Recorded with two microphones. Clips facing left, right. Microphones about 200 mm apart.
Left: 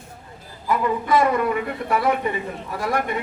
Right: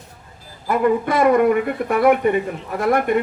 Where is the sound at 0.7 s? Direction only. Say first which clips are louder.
Right 3 dB; 55° right (ahead or behind).